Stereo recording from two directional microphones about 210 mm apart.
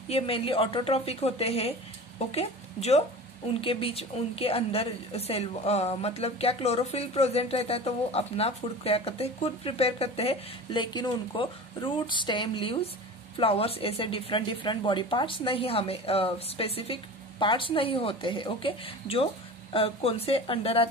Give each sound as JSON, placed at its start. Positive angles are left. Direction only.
{"t": 0.1, "sound": "a woman's voice", "side_deg": 25}